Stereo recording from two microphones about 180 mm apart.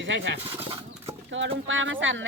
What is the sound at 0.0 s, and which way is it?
Speech, 90° right.